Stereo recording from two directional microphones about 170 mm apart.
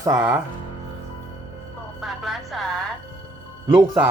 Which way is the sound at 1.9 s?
Centre (ahead or behind).